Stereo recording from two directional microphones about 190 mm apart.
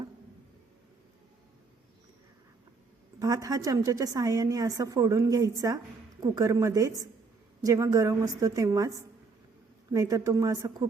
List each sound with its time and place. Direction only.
3.2 s a woman's voice: 20° right (ahead or behind)
9.9 s a woman's voice: 20° right (ahead or behind)